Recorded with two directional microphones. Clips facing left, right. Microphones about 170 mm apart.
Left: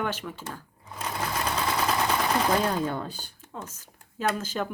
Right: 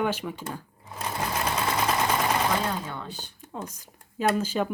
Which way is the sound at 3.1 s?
15° right (ahead or behind).